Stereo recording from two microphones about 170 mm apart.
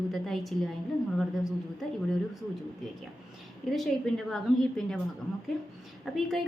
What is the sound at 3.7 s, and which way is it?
A woman's voice, centre (ahead or behind).